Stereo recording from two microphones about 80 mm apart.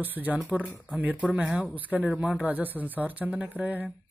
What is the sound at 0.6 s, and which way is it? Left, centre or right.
Speech, left.